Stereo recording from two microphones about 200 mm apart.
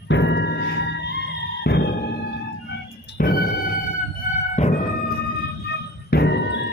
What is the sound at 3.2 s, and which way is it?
Music, 45° left (ahead or behind).